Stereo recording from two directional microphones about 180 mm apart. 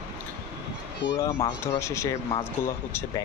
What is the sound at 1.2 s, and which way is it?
Speech, 20° left (ahead or behind).